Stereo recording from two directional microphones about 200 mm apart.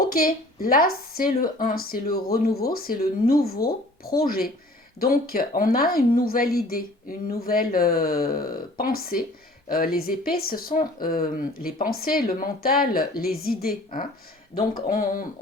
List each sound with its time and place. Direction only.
0.0 s speech: 45° left (ahead or behind)